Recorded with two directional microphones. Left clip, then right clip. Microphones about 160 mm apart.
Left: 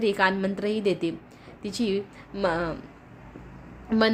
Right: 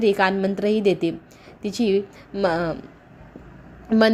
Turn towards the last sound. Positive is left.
turn(degrees=-20)  # may be behind; listen again after turning